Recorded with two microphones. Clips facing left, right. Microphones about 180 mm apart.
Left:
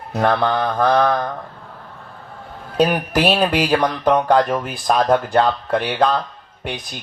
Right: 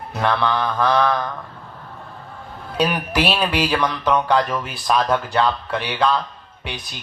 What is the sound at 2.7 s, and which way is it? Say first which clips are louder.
Speech: left 3 dB; 45° left (ahead or behind).